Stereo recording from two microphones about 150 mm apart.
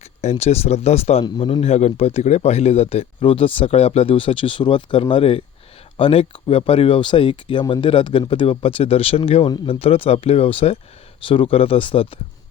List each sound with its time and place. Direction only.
0.2 s speech: 45° left (ahead or behind)
1.2 s speech: 30° left (ahead or behind)